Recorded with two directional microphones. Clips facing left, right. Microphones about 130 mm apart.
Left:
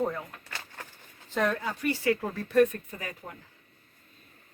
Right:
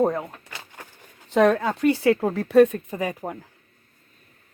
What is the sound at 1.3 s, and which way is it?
Speech, 75° right (ahead or behind).